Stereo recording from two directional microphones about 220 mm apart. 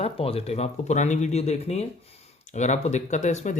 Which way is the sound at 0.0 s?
25° left (ahead or behind).